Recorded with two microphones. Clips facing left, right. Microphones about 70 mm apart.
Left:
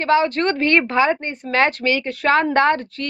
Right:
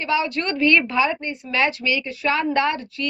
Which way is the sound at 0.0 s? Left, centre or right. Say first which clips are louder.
Left 6 dB; left.